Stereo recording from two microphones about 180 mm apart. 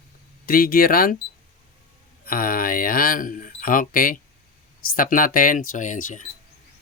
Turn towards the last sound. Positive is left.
turn(degrees=45)  # may be behind; listen again after turning